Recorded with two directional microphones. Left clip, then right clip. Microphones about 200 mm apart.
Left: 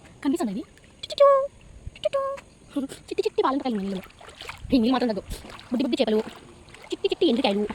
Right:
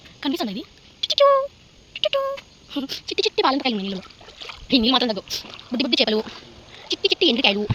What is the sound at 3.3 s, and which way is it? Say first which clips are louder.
Speech: right 4 dB; 15° right (ahead or behind).